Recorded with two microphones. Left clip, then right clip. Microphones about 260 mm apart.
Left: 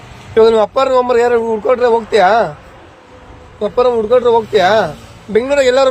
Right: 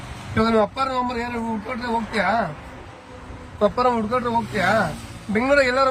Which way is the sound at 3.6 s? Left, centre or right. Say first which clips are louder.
Left 7 dB; centre.